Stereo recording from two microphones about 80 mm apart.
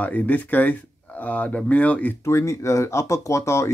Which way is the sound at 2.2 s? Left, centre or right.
Left.